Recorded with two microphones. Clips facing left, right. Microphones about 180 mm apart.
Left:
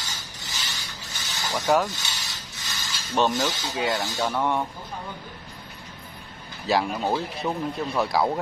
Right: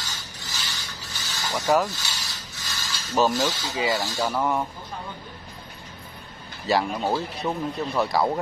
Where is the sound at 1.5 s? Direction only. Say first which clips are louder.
Even; centre (ahead or behind).